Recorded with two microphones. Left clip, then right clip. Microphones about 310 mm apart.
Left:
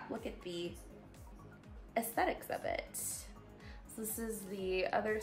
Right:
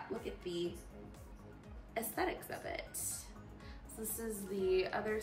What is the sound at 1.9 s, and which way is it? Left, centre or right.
A woman's voice, left.